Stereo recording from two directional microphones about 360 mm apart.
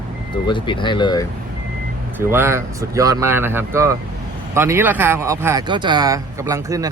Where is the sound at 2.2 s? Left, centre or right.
Centre.